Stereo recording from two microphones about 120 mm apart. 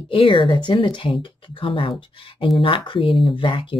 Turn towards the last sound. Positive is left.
turn(degrees=45)  # may be behind; listen again after turning